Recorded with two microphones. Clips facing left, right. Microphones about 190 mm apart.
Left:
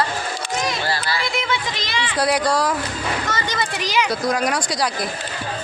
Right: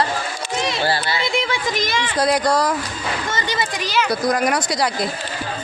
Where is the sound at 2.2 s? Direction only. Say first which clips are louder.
Right 1 dB; 20° right (ahead or behind).